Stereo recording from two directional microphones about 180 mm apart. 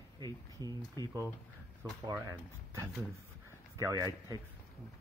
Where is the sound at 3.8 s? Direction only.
20° right (ahead or behind).